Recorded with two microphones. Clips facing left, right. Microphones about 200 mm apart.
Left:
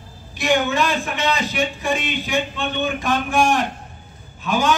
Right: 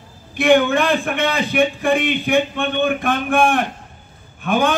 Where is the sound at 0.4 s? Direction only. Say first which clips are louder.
Right 5 dB; 55° right (ahead or behind).